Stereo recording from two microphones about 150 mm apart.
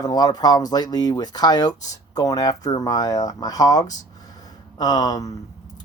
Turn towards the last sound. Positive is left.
turn(degrees=25)  # may be behind; listen again after turning